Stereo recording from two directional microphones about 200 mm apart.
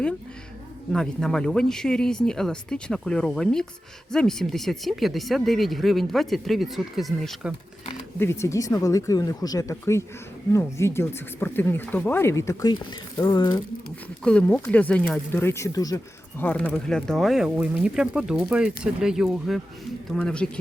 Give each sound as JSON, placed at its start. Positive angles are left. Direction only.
{"t": 0.9, "sound": "speech", "side_deg": 5}
{"t": 8.2, "sound": "speech", "side_deg": 15}
{"t": 14.3, "sound": "speech", "side_deg": 5}